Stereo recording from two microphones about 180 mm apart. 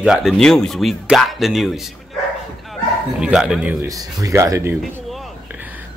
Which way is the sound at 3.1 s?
5° right (ahead or behind).